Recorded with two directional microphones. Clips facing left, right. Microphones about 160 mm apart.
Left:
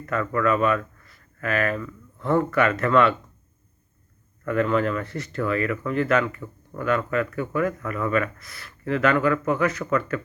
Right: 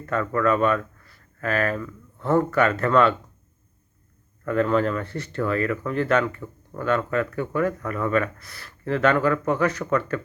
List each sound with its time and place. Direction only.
0.0 s speech: 30° right (ahead or behind)
4.4 s speech: 35° right (ahead or behind)